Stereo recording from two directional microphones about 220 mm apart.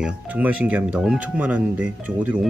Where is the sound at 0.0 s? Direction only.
5° right (ahead or behind).